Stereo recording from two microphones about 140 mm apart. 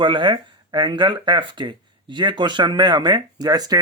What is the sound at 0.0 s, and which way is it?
Speech, 35° right (ahead or behind).